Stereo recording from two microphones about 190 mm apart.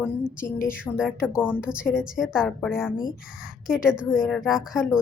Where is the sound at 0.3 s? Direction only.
45° left (ahead or behind).